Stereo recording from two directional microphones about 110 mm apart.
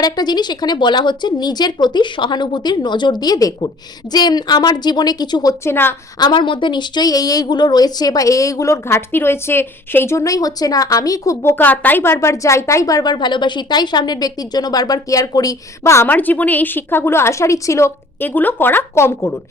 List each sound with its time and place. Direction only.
0.0 s a woman's voice: 40° left (ahead or behind)
5.6 s a woman's voice: 20° left (ahead or behind)
6.1 s a woman's voice: 45° left (ahead or behind); by 19.3 s 25° left (ahead or behind)